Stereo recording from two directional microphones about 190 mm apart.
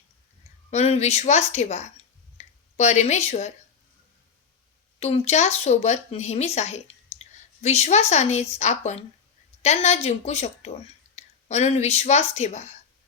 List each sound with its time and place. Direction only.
0.7 s a woman's voice: 35° left (ahead or behind)
4.9 s a woman's voice: 35° left (ahead or behind)